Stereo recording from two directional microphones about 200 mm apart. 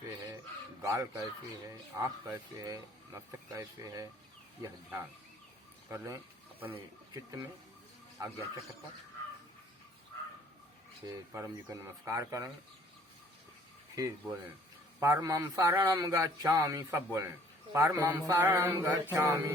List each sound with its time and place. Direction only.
0.8 s a man's voice: 15° right (ahead or behind)
2.3 s a man's voice: 15° right (ahead or behind)
11.0 s a man's voice: 20° right (ahead or behind)
13.9 s a man's voice: 15° right (ahead or behind)